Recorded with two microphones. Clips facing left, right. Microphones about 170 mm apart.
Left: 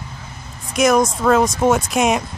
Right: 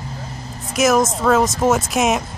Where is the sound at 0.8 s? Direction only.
Centre (ahead or behind).